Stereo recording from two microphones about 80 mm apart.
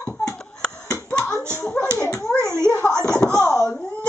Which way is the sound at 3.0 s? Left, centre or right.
Centre.